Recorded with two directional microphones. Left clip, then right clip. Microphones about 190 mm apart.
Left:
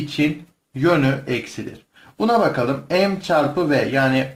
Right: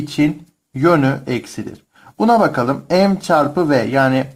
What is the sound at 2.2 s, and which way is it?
Speech, 30° right (ahead or behind).